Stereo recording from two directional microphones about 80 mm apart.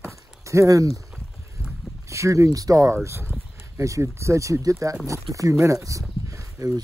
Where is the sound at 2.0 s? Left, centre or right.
Right.